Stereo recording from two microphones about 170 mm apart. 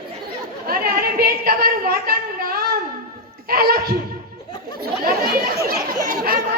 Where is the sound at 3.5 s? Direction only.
60° right (ahead or behind).